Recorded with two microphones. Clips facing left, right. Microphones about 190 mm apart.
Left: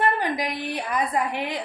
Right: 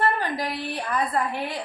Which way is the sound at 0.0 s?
15° left (ahead or behind).